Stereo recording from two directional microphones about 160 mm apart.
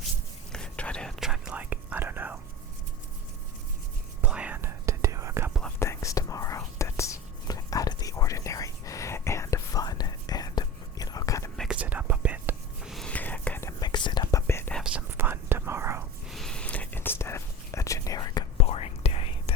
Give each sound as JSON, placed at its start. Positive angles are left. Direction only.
{"t": 0.5, "sound": "whispering", "side_deg": 5}
{"t": 4.2, "sound": "whispering", "side_deg": -10}
{"t": 5.8, "sound": "whispering", "side_deg": 20}
{"t": 11.5, "sound": "whispering", "side_deg": 0}
{"t": 11.8, "sound": "whispering", "side_deg": -10}
{"t": 14.8, "sound": "whispering", "side_deg": -10}
{"t": 16.3, "sound": "whispering", "side_deg": 5}
{"t": 18.5, "sound": "whispering", "side_deg": 40}